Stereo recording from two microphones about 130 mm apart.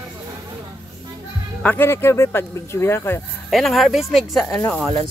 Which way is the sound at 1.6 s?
15° left (ahead or behind).